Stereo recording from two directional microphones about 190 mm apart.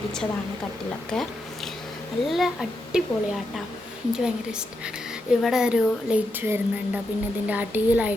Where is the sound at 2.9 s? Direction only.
5° right (ahead or behind).